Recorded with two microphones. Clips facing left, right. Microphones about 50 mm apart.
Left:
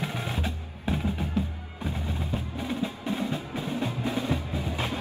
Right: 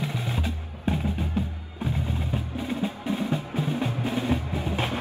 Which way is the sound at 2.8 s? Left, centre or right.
Right.